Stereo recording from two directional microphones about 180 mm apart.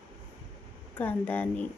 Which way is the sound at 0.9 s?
10° left (ahead or behind).